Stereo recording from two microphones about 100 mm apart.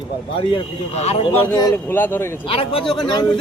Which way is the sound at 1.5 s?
35° left (ahead or behind).